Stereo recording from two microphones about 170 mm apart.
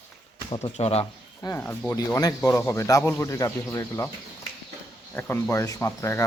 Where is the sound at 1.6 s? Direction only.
10° left (ahead or behind).